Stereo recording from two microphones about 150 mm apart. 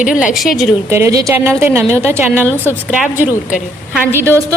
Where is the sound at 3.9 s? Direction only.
15° right (ahead or behind).